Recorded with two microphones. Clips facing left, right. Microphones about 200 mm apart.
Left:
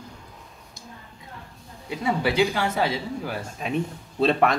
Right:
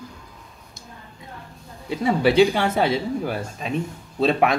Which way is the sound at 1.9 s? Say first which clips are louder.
Right 5 dB; 25° right (ahead or behind).